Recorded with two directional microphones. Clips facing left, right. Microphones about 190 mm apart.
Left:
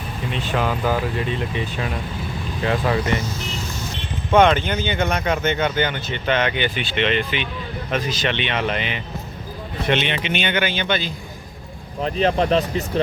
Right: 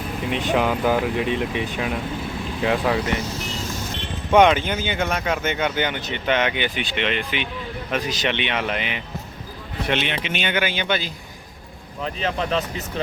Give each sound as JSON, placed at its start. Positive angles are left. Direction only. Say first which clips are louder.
{"t": 0.3, "sound": "speech", "louder": "right 2 dB", "side_deg": -15}
{"t": 4.3, "sound": "speech", "louder": "even", "side_deg": -10}
{"t": 12.0, "sound": "speech", "louder": "left 6 dB", "side_deg": 35}